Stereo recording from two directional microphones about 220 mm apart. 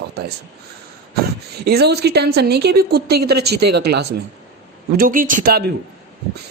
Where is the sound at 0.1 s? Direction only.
50° right (ahead or behind).